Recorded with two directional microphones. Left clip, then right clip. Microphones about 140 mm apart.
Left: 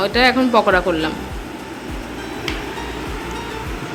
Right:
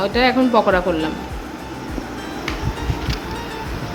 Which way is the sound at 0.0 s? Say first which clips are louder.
Left 1 dB; 5° right (ahead or behind).